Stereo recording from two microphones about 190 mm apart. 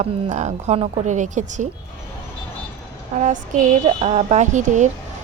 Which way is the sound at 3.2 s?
40° right (ahead or behind).